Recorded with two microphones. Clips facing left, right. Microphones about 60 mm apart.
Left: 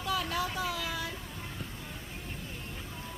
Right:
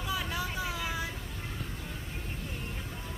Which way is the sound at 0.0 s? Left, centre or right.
Centre.